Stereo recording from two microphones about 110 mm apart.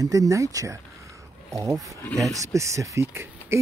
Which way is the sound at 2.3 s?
30° right (ahead or behind).